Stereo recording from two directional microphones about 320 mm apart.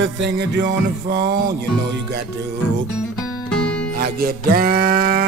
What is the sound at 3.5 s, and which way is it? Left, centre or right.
Music, centre.